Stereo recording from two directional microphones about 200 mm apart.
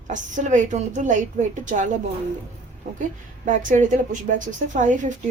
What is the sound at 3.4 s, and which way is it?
Speech, 40° right (ahead or behind).